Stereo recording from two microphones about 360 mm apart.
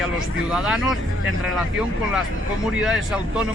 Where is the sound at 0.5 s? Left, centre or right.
Centre.